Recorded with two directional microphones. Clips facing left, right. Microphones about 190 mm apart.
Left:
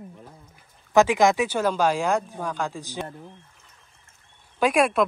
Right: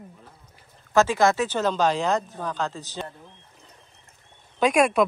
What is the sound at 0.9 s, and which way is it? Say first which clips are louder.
Speech: left 2 dB; 15° left (ahead or behind).